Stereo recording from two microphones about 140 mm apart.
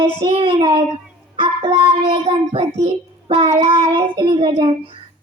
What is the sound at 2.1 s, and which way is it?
Child singing, 40° right (ahead or behind).